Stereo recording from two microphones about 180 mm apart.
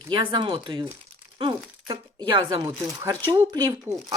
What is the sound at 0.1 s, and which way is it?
Speech, 25° right (ahead or behind).